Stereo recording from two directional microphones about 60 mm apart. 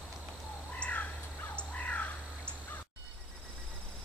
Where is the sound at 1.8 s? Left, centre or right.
Left.